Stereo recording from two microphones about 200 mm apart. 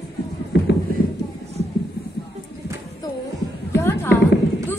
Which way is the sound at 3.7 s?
10° left (ahead or behind).